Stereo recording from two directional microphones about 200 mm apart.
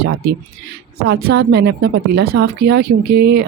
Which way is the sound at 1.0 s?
55° right (ahead or behind).